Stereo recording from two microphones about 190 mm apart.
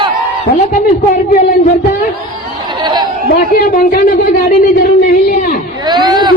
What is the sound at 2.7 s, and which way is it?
Chatter, 25° right (ahead or behind).